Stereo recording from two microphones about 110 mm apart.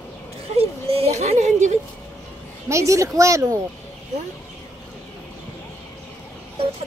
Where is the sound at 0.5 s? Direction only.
70° right (ahead or behind); by 1.7 s 90° right.